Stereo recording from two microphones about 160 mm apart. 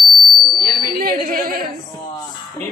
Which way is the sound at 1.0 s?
65° right (ahead or behind).